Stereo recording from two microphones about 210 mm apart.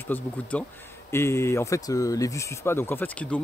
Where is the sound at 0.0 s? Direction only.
10° left (ahead or behind).